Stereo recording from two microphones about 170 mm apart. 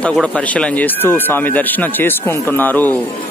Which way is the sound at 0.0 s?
5° left (ahead or behind).